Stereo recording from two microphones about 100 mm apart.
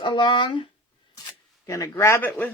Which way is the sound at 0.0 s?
50° left (ahead or behind).